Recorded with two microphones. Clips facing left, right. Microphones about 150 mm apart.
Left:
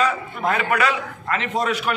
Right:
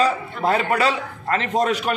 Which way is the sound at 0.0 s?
30° right (ahead or behind).